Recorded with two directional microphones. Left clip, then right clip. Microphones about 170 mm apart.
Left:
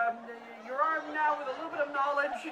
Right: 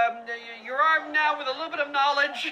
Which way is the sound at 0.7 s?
20° right (ahead or behind).